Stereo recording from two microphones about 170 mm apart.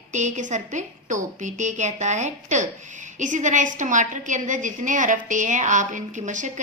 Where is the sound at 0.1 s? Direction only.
45° right (ahead or behind).